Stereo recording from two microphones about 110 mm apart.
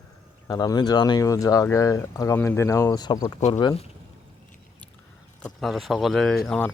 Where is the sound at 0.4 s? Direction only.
35° left (ahead or behind).